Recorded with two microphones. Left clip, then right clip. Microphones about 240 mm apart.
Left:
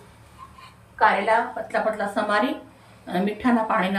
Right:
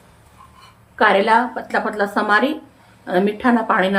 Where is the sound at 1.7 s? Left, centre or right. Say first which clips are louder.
Right 4 dB; centre.